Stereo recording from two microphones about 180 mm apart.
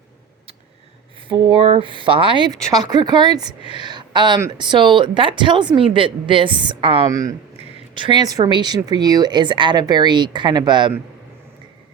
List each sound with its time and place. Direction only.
1.3 s a woman's voice: 30° right (ahead or behind)
7.1 s speech: 20° right (ahead or behind)